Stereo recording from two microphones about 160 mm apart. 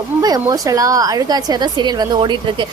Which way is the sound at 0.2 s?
25° right (ahead or behind).